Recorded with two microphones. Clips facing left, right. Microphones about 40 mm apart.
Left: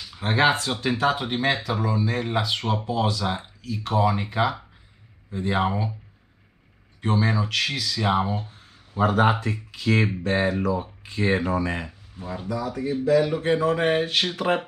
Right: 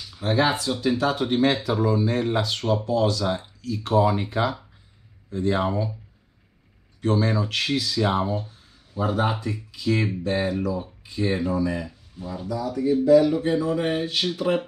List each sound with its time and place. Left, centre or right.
0.1 s speech: left
1.1 s speech: centre
2.2 s speech: centre
3.8 s speech: centre
5.3 s speech: left
7.2 s speech: centre
7.7 s speech: centre
8.0 s speech: centre
8.5 s a sound: left
9.4 s speech: left
12.2 s speech: left